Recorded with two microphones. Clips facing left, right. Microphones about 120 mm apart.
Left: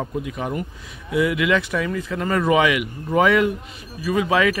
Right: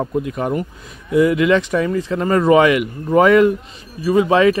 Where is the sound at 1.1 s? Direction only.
40° right (ahead or behind).